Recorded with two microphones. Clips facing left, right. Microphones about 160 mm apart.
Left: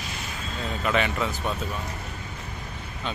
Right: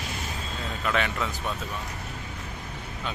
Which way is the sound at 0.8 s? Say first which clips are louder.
Left 2 dB; centre (ahead or behind).